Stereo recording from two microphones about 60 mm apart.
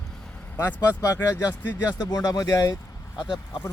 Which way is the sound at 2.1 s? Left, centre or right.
Left.